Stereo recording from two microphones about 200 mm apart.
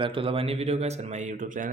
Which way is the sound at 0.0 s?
25° right (ahead or behind).